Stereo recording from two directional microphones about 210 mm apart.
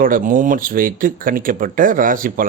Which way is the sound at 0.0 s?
40° right (ahead or behind).